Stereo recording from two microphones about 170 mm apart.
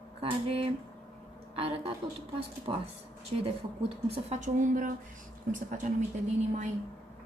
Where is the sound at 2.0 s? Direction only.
25° right (ahead or behind).